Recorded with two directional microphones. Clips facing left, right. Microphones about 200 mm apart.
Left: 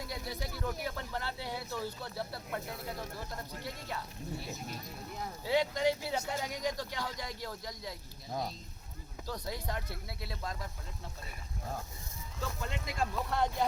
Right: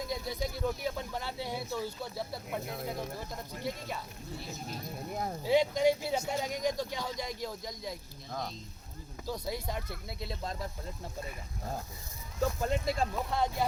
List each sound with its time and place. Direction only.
0.1 s speech: 15° right (ahead or behind)
5.5 s speech: 15° right (ahead or behind)
8.3 s speech: 10° left (ahead or behind)
9.2 s speech: 10° right (ahead or behind)
12.4 s speech: 40° right (ahead or behind)
13.1 s speech: 10° right (ahead or behind)